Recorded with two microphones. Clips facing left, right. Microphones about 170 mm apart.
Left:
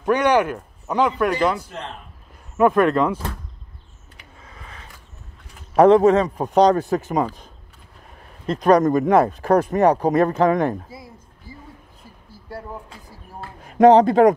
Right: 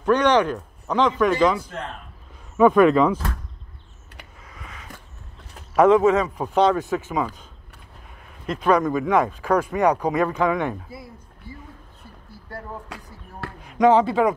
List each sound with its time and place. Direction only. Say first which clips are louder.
0.0 s speech: even; 10° left (ahead or behind)
4.5 s a sound: even; 30° left (ahead or behind)
5.8 s speech: left 3 dB; 35° left (ahead or behind)
8.5 s speech: left 4 dB; 40° left (ahead or behind)
12.4 s speech: left 2 dB; 10° left (ahead or behind)
12.8 s basketball bounce: right 3 dB; 75° right (ahead or behind)
13.7 s a man's voice: left 5 dB; 45° left (ahead or behind)